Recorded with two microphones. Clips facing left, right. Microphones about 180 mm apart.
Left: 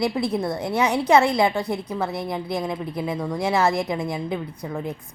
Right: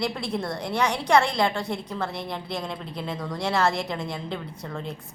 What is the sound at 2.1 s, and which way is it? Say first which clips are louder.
Speech: left 5 dB; centre (ahead or behind).